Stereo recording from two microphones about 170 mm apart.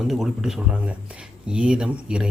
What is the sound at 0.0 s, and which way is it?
A man's voice, centre (ahead or behind).